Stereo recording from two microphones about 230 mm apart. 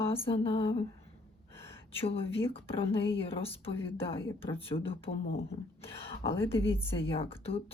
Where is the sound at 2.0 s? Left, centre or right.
Left.